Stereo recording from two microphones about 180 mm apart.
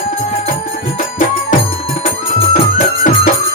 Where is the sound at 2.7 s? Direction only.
50° left (ahead or behind).